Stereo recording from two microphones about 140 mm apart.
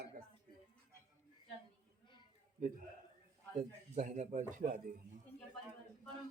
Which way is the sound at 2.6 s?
65° right (ahead or behind).